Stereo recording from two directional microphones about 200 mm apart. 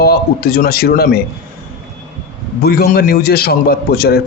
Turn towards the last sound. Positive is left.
turn(degrees=50)  # may be behind; listen again after turning